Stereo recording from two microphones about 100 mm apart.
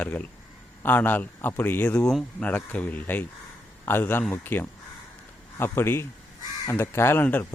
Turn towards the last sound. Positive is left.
turn(degrees=20)  # may be behind; listen again after turning